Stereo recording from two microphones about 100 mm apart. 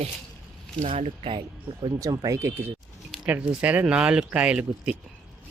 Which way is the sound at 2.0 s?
35° right (ahead or behind).